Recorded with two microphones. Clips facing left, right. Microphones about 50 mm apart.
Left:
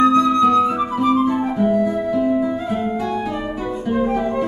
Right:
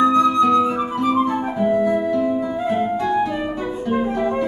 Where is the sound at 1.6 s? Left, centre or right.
Centre.